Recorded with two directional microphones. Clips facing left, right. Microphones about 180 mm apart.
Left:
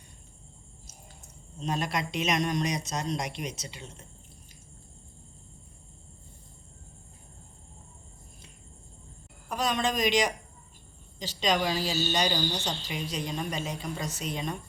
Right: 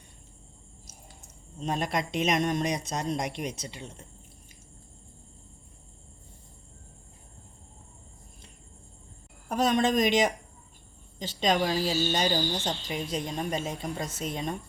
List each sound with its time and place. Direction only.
1.6 s speech: 50° right (ahead or behind)
9.5 s speech: 50° right (ahead or behind)